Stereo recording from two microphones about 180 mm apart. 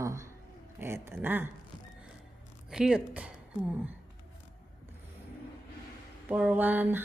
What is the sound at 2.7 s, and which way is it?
Speech, 5° right (ahead or behind).